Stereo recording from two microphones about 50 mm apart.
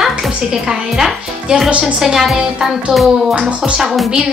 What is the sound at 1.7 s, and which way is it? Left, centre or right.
Speech, right.